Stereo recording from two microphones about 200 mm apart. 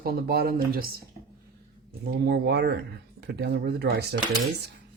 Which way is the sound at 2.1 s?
55° right (ahead or behind).